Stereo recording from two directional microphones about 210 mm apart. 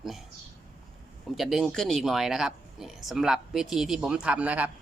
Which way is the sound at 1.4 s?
Centre (ahead or behind).